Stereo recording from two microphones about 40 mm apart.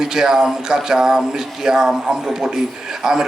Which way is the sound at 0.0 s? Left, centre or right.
Centre.